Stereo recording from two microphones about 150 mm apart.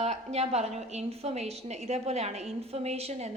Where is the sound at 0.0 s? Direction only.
45° right (ahead or behind).